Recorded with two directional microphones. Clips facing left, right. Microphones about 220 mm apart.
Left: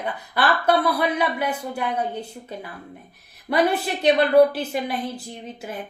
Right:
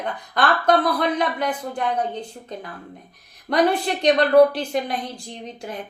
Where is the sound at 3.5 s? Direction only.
5° left (ahead or behind).